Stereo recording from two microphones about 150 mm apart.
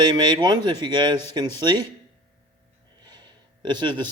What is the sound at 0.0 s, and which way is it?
Speech, 30° right (ahead or behind).